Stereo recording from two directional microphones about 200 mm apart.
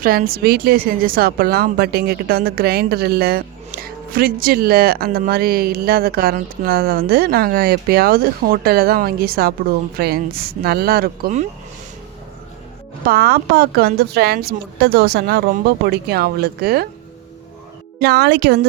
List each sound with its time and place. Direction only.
0.0 s speech: 45° right (ahead or behind)
13.1 s speech: 50° right (ahead or behind)
18.0 s speech: 55° right (ahead or behind)